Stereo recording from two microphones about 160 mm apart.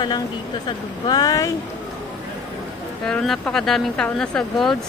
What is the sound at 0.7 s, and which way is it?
Speech, 25° left (ahead or behind).